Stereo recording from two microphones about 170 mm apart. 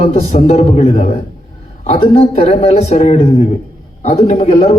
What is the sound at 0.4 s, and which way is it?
A man's voice, 35° left (ahead or behind).